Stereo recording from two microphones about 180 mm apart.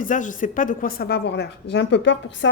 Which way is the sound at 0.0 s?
45° left (ahead or behind).